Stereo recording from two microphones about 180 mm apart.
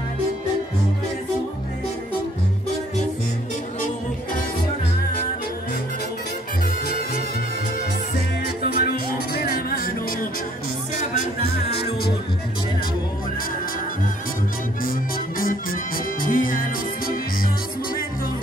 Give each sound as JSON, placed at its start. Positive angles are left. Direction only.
{"t": 8.6, "sound": "music", "side_deg": 60}
{"t": 15.3, "sound": "music", "side_deg": 50}